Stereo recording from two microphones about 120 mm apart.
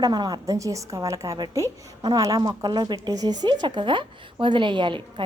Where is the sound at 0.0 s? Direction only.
35° right (ahead or behind).